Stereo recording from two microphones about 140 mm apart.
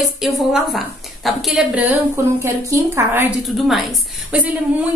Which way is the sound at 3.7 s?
5° right (ahead or behind).